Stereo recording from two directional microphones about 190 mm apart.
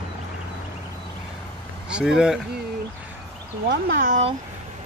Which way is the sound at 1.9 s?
5° right (ahead or behind).